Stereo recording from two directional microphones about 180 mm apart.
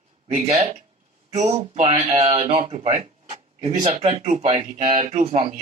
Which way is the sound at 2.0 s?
35° right (ahead or behind).